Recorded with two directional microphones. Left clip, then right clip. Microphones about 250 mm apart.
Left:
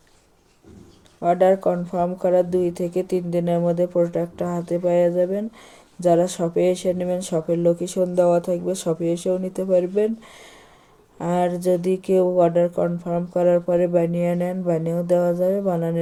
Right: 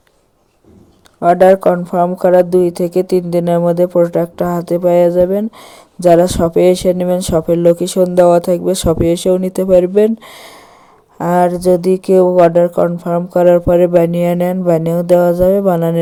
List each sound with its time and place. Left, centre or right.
1.2 s a woman's voice: right